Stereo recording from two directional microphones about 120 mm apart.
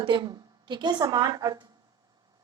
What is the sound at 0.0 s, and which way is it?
A woman's voice, 40° right (ahead or behind).